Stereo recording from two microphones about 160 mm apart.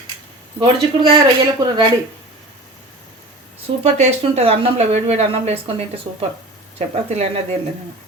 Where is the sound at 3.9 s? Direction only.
45° right (ahead or behind).